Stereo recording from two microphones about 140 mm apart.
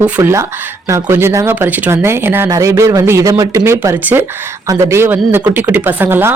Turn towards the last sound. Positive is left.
turn(degrees=-15)  # may be behind; listen again after turning